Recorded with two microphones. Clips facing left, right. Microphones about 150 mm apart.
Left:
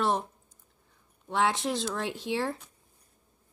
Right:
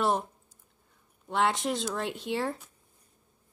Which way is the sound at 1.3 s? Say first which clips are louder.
Even; centre (ahead or behind).